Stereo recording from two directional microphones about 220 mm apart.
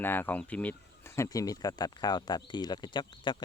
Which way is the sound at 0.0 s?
10° left (ahead or behind).